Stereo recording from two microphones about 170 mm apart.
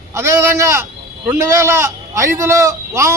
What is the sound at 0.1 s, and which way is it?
A man's voice, 15° right (ahead or behind).